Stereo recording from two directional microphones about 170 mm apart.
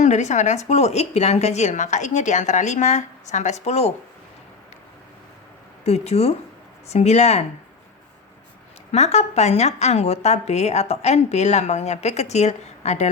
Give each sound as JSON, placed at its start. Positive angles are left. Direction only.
{"t": 0.0, "sound": "a woman's voice", "side_deg": 45}
{"t": 5.8, "sound": "a woman's voice", "side_deg": 40}
{"t": 8.9, "sound": "a woman's voice", "side_deg": 40}